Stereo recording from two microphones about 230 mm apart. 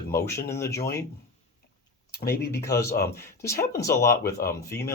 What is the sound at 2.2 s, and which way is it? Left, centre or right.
Speech, left.